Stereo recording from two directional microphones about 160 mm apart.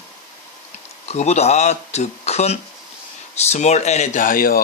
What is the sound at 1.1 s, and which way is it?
Speech, 45° left (ahead or behind).